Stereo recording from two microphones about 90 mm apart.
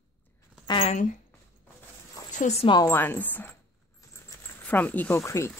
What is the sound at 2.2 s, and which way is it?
Zipper, 45° left (ahead or behind).